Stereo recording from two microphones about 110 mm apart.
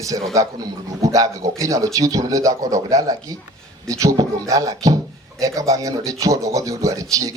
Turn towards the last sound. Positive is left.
turn(degrees=-30)  # may be behind; listen again after turning